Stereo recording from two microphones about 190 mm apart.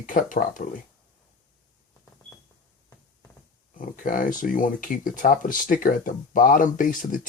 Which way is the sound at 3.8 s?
45° left (ahead or behind).